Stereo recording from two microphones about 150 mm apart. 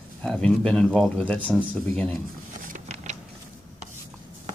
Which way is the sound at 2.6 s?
55° right (ahead or behind).